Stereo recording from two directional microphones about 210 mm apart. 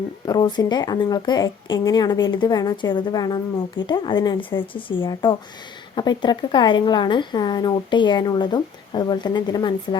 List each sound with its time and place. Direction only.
0.3 s a woman's voice: 20° left (ahead or behind)